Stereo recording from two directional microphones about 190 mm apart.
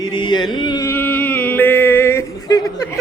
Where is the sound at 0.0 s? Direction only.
25° left (ahead or behind).